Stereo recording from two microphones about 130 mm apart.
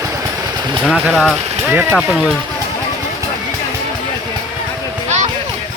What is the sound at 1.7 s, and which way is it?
Speech, 15° right (ahead or behind).